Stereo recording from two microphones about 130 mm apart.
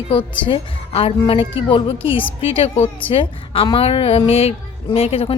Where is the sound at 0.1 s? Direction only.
40° left (ahead or behind).